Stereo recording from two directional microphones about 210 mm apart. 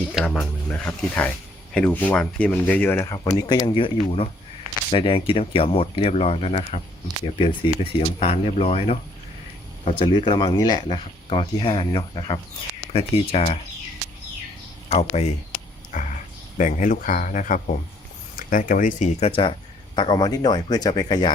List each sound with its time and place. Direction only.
0.1 s speech: centre (ahead or behind); by 13.6 s 30° left (ahead or behind)
15.9 s a sound: 40° left (ahead or behind)
16.6 s speech: 35° left (ahead or behind); by 21.3 s 20° left (ahead or behind)